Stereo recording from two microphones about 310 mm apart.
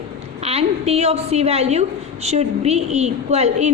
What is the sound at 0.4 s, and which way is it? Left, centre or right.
A woman's voice, centre.